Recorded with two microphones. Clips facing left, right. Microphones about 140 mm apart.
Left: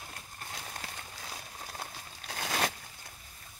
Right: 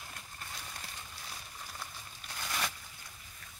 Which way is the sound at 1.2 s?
65° left (ahead or behind).